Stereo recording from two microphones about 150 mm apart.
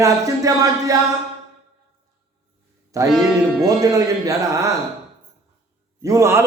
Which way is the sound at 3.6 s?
20° right (ahead or behind).